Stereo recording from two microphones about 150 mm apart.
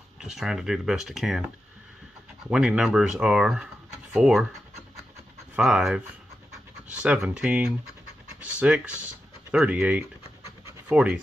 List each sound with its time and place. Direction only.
0.2 s speech: 5° right (ahead or behind)
2.4 s speech: 5° right (ahead or behind)
5.6 s speech: 5° right (ahead or behind)